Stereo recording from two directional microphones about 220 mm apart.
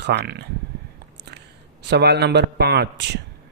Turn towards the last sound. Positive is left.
turn(degrees=-50)  # may be behind; listen again after turning